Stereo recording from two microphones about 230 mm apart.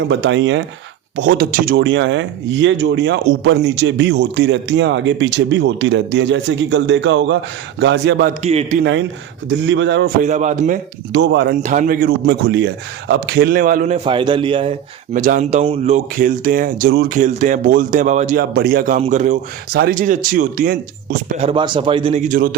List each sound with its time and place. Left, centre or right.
0.1 s speech: right
1.5 s speech: right
1.8 s speech: right
8.4 s a man's voice: right
9.6 s speech: right
10.2 s speech: right
11.1 s speech: right
11.6 s speech: right
15.1 s speech: right
21.4 s a man's voice: right